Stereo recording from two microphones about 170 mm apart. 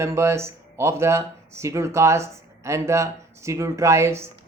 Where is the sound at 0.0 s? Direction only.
15° right (ahead or behind).